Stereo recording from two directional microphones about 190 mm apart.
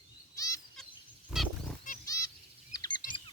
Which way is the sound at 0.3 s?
20° left (ahead or behind).